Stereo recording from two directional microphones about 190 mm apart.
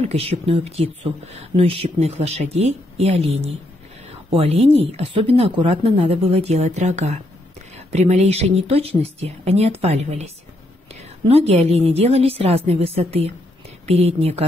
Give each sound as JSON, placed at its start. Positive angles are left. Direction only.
{"t": 0.0, "sound": "speech", "side_deg": -35}